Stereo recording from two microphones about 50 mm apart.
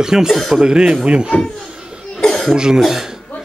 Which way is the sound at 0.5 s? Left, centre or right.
Centre.